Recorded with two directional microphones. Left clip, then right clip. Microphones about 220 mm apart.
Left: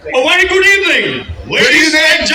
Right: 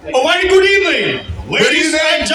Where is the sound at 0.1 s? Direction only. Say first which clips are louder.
Left 1 dB; 45° right (ahead or behind).